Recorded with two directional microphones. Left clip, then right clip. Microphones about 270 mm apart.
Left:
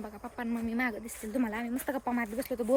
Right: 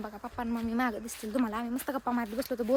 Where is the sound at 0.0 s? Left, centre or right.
Centre.